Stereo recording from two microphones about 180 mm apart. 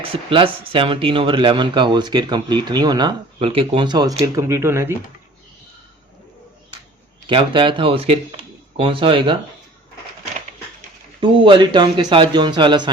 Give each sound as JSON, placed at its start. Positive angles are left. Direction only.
{"t": 0.1, "sound": "speech", "side_deg": -30}
{"t": 7.3, "sound": "speech", "side_deg": -25}
{"t": 11.2, "sound": "speech", "side_deg": -25}